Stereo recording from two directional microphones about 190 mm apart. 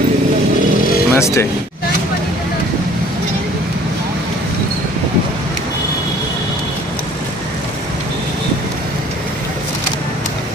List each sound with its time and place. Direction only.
1.1 s speech: 15° left (ahead or behind)